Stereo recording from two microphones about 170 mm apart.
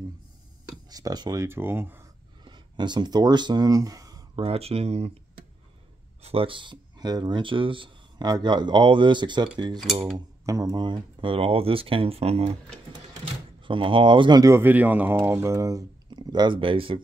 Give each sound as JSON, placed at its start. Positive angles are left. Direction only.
{"t": 0.8, "sound": "speech", "side_deg": -20}
{"t": 2.4, "sound": "speech", "side_deg": -25}
{"t": 4.4, "sound": "speech", "side_deg": -35}
{"t": 6.2, "sound": "speech", "side_deg": -35}
{"t": 13.7, "sound": "speech", "side_deg": -30}